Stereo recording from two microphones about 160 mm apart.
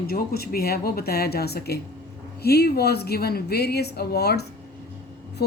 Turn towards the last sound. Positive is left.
turn(degrees=85)